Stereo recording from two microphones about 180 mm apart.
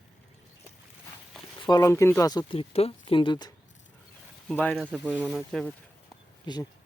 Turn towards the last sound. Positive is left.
turn(degrees=25)  # may be behind; listen again after turning